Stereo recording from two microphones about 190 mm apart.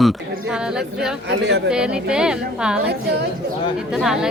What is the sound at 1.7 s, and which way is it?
Speech, 5° right (ahead or behind).